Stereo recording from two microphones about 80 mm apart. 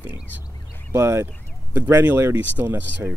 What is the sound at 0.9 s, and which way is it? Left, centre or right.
Speech, right.